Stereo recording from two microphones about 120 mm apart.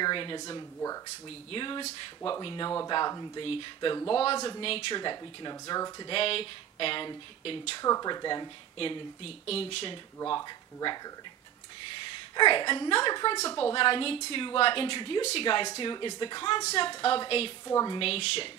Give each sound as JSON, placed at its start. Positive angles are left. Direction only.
{"t": 0.0, "sound": "speech", "side_deg": 40}
{"t": 1.5, "sound": "speech", "side_deg": 45}
{"t": 2.9, "sound": "speech", "side_deg": 35}
{"t": 4.1, "sound": "speech", "side_deg": 50}
{"t": 4.9, "sound": "speech", "side_deg": 40}
{"t": 6.0, "sound": "speech", "side_deg": 50}
{"t": 7.8, "sound": "speech", "side_deg": 30}
{"t": 8.7, "sound": "speech", "side_deg": 50}
{"t": 10.3, "sound": "speech", "side_deg": 35}
{"t": 12.4, "sound": "speech", "side_deg": 45}
{"t": 13.6, "sound": "speech", "side_deg": 45}
{"t": 16.6, "sound": "a woman's voice", "side_deg": 55}
{"t": 17.6, "sound": "a woman's voice", "side_deg": 30}
{"t": 17.9, "sound": "speech", "side_deg": 55}